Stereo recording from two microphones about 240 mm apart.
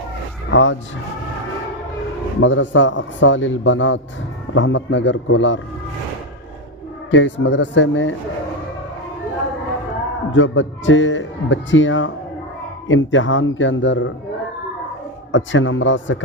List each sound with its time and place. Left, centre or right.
0.5 s speech: left
2.4 s speech: left
7.1 s speech: left
10.3 s speech: left
15.3 s speech: left